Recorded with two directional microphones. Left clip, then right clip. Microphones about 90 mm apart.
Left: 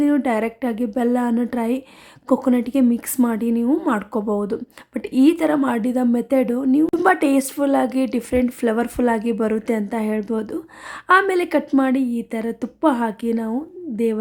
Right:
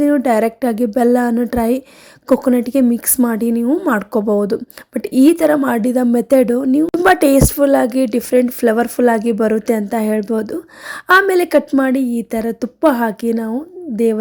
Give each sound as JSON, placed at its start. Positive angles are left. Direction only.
{"t": 0.0, "sound": "speech", "side_deg": -25}
{"t": 6.8, "sound": "a woman's voice", "side_deg": 0}
{"t": 7.1, "sound": "speech", "side_deg": -30}